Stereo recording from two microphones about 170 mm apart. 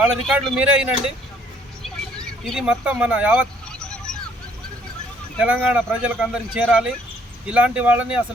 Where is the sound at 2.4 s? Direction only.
Centre (ahead or behind).